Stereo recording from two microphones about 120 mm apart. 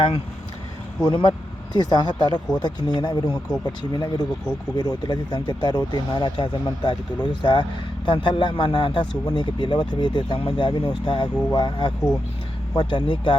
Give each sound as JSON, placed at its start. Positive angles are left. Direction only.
{"t": 1.0, "sound": "speech", "side_deg": 40}